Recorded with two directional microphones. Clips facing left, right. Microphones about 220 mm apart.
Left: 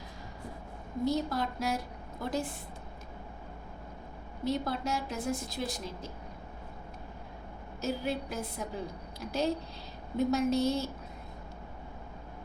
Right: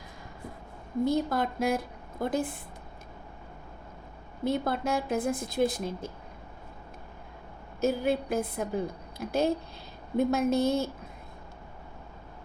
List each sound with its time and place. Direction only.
1.0 s a woman's voice: 55° right (ahead or behind)
4.4 s a woman's voice: 55° right (ahead or behind)
7.8 s a woman's voice: 55° right (ahead or behind)